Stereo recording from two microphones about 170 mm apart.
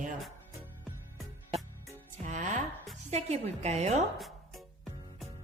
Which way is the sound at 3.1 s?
40° right (ahead or behind).